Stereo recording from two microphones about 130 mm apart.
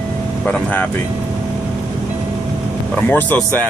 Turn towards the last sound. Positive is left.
turn(degrees=15)  # may be behind; listen again after turning